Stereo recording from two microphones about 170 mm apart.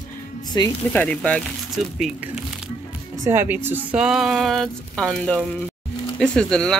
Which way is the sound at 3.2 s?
15° right (ahead or behind).